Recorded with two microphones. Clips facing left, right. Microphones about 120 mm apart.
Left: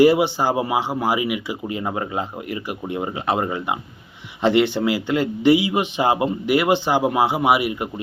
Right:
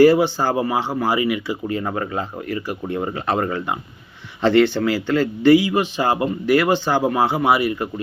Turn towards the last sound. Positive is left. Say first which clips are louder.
# right 1 dB
turn(degrees=15)  # may be behind; listen again after turning